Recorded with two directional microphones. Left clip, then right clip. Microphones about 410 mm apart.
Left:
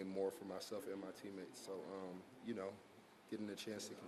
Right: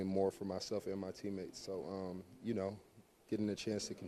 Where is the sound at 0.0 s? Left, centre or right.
Right.